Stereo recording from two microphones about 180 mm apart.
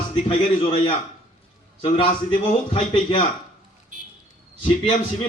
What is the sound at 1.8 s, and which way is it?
A man's voice, 30° left (ahead or behind).